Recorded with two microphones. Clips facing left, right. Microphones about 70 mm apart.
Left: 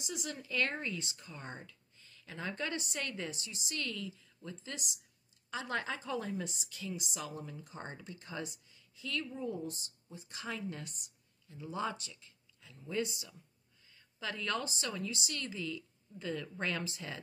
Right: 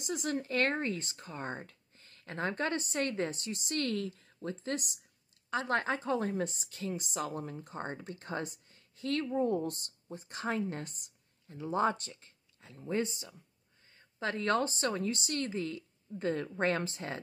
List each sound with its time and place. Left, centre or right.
0.0 s a woman's voice: right